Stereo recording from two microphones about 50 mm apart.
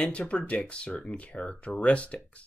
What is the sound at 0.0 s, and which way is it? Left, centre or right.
Speech, left.